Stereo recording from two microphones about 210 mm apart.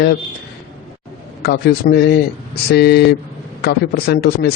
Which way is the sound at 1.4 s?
50° left (ahead or behind).